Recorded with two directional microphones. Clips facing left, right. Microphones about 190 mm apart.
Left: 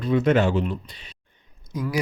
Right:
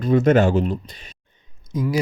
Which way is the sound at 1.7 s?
25° right (ahead or behind).